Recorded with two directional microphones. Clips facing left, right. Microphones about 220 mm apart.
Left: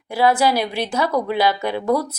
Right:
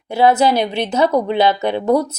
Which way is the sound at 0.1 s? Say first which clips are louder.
Right 3 dB; 25° right (ahead or behind).